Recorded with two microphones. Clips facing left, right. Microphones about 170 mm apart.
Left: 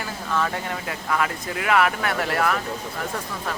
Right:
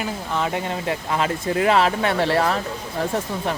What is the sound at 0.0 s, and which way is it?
Speech, 20° right (ahead or behind).